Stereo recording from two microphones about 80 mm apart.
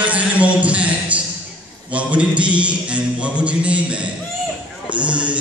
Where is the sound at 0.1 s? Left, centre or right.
Centre.